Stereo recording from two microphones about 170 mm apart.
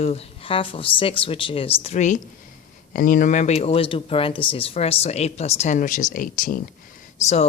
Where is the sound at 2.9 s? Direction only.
55° left (ahead or behind).